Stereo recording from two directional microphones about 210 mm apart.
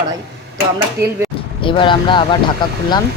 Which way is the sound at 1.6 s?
25° left (ahead or behind).